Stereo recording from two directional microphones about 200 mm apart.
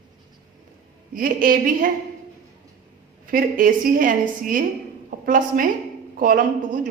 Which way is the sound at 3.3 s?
45° right (ahead or behind).